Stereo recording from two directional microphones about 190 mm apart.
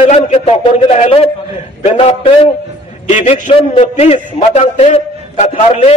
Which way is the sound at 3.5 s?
30° left (ahead or behind).